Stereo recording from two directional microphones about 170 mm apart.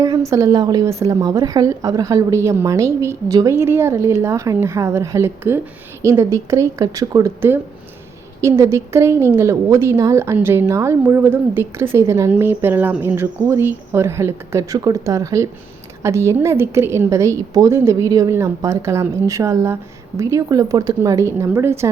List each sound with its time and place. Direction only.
0.0 s a woman's voice: 20° right (ahead or behind)